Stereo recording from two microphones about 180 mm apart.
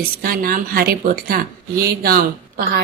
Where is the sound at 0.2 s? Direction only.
55° right (ahead or behind).